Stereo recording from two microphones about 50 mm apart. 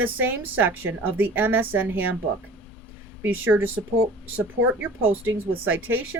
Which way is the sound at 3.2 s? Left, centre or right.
Right.